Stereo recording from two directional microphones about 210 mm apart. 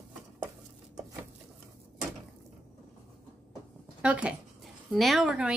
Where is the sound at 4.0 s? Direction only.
5° right (ahead or behind).